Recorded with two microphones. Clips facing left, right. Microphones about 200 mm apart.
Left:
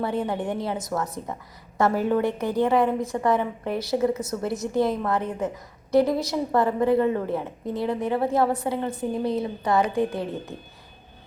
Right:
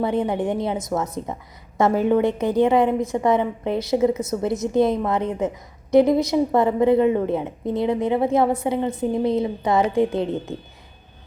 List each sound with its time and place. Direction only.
0.0 s a woman's voice: 20° right (ahead or behind)